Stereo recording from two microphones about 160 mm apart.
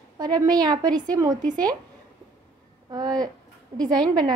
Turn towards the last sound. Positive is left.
turn(degrees=-25)  # may be behind; listen again after turning